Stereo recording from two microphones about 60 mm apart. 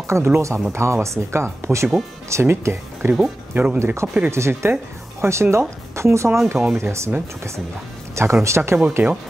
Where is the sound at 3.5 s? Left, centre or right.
Right.